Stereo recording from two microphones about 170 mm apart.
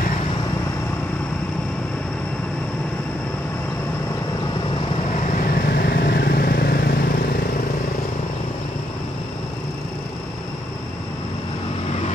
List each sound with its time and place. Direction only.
5.4 s vehicle: 60° left (ahead or behind)